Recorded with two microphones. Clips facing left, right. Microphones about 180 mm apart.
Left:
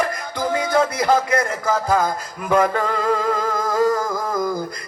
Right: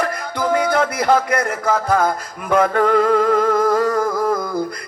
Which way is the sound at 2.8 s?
60° right (ahead or behind).